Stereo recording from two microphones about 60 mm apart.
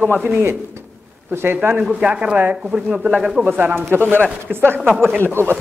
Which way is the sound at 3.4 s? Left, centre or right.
Right.